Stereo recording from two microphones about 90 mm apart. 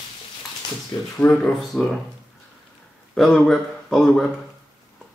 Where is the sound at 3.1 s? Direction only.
5° left (ahead or behind).